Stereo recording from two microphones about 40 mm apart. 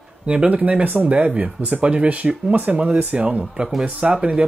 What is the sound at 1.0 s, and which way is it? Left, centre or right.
Speech, right.